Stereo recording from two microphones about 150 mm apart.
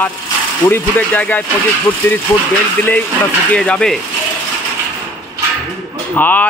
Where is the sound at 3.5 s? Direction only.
5° left (ahead or behind).